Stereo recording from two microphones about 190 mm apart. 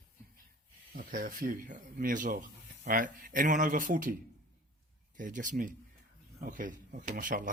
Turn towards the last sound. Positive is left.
turn(degrees=-45)  # may be behind; listen again after turning